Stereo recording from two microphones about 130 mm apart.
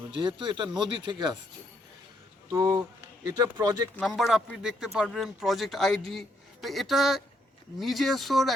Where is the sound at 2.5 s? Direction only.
25° right (ahead or behind).